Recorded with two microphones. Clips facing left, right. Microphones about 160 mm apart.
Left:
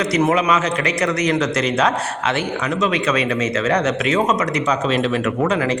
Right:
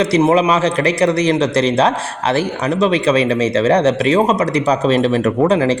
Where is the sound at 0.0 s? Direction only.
30° right (ahead or behind).